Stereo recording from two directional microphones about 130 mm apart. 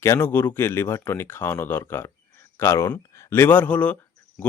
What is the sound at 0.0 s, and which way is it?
Speech, 20° left (ahead or behind).